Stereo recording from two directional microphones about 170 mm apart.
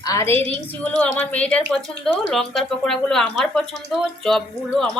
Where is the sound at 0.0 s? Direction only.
20° left (ahead or behind).